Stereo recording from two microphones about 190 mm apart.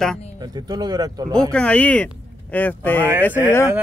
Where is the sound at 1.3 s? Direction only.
5° left (ahead or behind).